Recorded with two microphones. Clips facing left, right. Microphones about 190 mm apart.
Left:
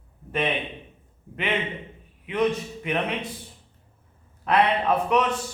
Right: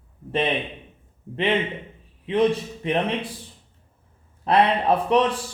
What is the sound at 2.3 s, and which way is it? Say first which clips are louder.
Speech: right 4 dB; 30° right (ahead or behind).